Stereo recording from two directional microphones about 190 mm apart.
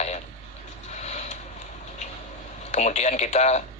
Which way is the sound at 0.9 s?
35° left (ahead or behind).